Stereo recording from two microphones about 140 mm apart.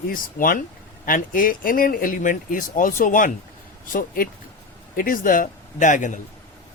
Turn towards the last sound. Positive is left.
turn(degrees=65)  # may be behind; listen again after turning